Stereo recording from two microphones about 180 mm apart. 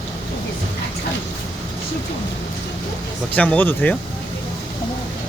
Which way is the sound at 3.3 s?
10° left (ahead or behind).